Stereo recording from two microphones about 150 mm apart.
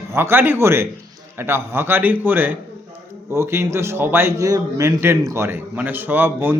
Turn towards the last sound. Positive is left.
turn(degrees=-15)  # may be behind; listen again after turning